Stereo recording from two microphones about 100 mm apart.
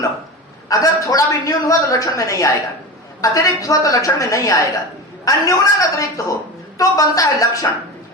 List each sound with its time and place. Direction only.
0.7 s a man's voice: 35° left (ahead or behind)